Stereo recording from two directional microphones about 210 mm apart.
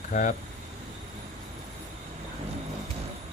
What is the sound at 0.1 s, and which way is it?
Speech, 40° left (ahead or behind).